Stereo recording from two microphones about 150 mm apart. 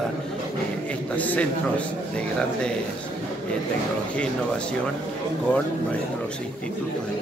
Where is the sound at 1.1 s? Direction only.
10° left (ahead or behind).